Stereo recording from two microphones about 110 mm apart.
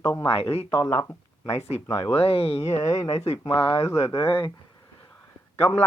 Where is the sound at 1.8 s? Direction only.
45° left (ahead or behind).